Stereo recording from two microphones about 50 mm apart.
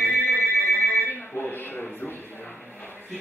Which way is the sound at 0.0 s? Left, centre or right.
Left.